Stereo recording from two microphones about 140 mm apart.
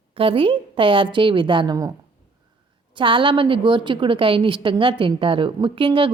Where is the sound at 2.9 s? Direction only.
35° right (ahead or behind).